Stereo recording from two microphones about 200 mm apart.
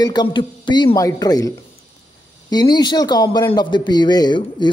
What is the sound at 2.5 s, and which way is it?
A man's voice, 20° left (ahead or behind).